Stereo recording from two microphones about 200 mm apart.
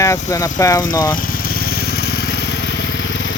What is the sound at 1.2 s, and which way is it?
Motorcycle, 45° left (ahead or behind).